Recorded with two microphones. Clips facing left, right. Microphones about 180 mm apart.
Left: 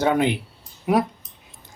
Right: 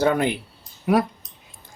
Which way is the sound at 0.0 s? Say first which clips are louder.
Even; 20° left (ahead or behind).